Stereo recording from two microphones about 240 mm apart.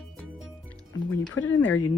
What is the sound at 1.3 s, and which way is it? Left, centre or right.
Speech, left.